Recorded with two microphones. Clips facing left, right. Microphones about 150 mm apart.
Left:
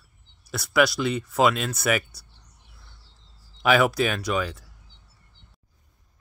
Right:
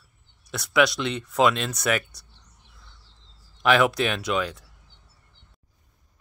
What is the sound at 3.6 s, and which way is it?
Speech, 5° left (ahead or behind).